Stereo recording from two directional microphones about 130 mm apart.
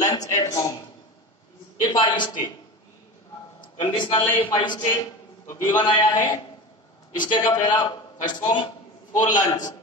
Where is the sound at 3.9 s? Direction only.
35° left (ahead or behind).